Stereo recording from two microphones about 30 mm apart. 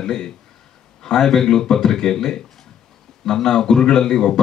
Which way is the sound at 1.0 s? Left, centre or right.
Centre.